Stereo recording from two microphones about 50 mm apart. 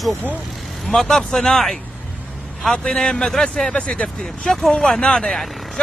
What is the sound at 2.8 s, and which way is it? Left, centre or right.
Speech, centre.